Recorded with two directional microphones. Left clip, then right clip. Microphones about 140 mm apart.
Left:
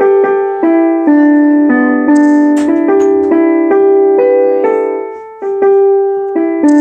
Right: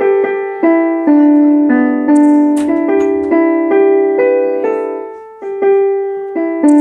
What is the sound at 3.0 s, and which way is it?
Music, 25° left (ahead or behind).